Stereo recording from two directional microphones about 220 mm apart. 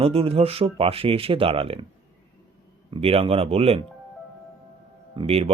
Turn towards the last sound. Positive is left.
turn(degrees=-25)  # may be behind; listen again after turning